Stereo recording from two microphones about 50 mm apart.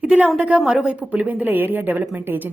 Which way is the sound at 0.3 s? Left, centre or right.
Right.